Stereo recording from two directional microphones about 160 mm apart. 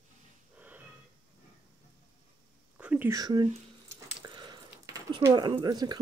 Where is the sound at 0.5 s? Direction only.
10° right (ahead or behind).